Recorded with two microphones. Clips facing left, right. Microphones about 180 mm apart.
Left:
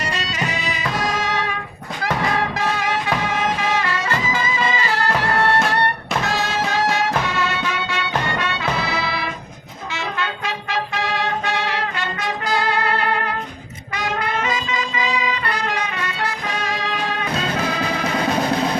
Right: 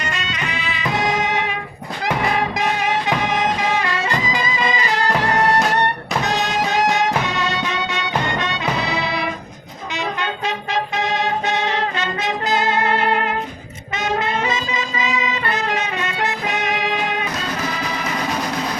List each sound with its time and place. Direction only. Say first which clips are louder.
0.0 s music: left 2 dB; 35° left (ahead or behind)
0.9 s music: right 4 dB; 20° right (ahead or behind)
13.9 s brass instrument: right 2 dB; 25° right (ahead or behind)